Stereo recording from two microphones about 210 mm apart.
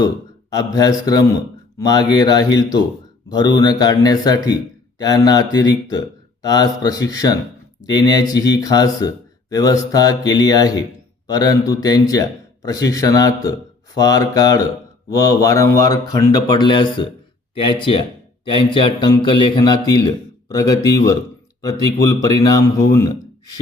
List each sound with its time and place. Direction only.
0.5 s a man's voice: 15° left (ahead or behind)